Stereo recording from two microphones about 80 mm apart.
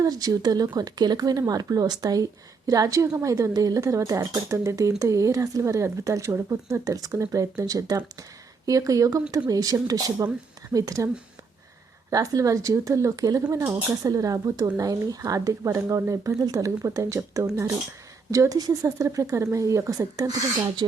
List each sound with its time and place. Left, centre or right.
0.0 s speech: right
12.1 s speech: right